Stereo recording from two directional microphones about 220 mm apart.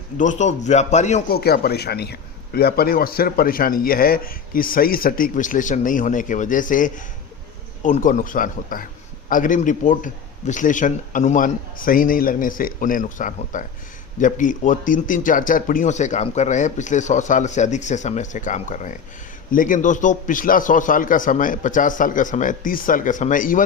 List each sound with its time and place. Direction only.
0.2 s a man's voice: 35° left (ahead or behind)
1.4 s a man's voice: 45° left (ahead or behind)